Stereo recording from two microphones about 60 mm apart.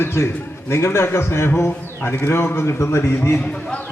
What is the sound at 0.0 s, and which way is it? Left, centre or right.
A man's voice, left.